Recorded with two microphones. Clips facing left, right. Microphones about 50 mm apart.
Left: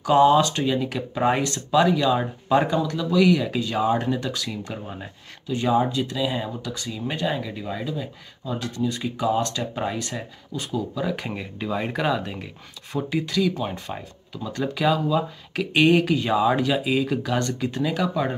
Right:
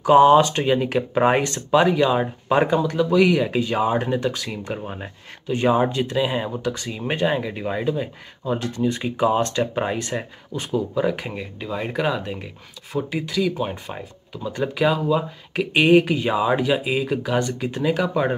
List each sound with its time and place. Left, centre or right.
0.0 s speech: right
11.1 s speech: centre